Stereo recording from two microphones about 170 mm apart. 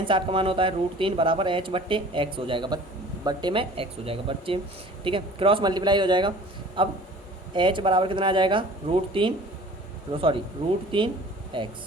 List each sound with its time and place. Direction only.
0.0 s speech: 30° right (ahead or behind)